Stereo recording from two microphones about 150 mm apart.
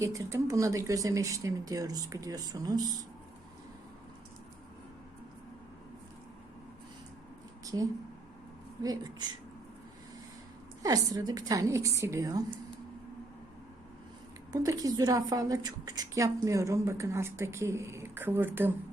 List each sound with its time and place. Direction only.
0.0 s a woman's voice: 20° right (ahead or behind)
7.6 s a sound: 25° right (ahead or behind)
8.8 s a woman's voice: 25° right (ahead or behind)
10.8 s a woman's voice: 25° right (ahead or behind)
14.5 s a woman's voice: 20° right (ahead or behind)